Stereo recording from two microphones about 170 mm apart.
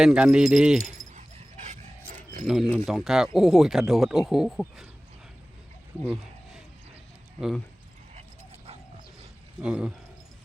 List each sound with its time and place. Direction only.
0.0 s speech: 5° right (ahead or behind)
1.0 s dog: 20° right (ahead or behind)
1.6 s filing: 45° right (ahead or behind)
2.5 s speech: centre (ahead or behind)
9.6 s speech: 5° right (ahead or behind)